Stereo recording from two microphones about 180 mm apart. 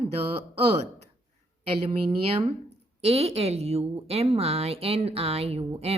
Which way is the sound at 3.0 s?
35° right (ahead or behind).